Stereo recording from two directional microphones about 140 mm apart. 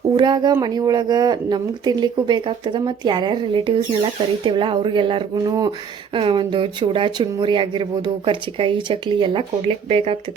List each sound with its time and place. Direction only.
0.1 s speech: 30° right (ahead or behind)